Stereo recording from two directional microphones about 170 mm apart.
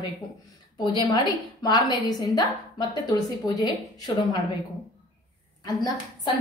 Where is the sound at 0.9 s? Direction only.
25° left (ahead or behind).